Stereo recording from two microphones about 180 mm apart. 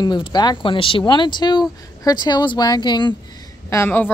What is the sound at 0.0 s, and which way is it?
Speech, 25° left (ahead or behind).